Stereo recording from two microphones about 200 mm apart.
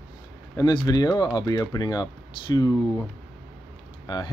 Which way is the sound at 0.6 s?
20° left (ahead or behind).